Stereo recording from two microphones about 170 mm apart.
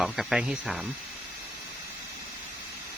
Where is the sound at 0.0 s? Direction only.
Centre (ahead or behind).